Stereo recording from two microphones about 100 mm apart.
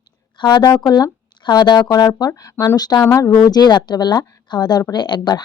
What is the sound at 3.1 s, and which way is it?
Speech, 30° left (ahead or behind).